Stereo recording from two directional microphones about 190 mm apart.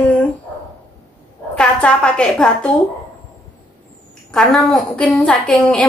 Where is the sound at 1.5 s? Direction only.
5° left (ahead or behind).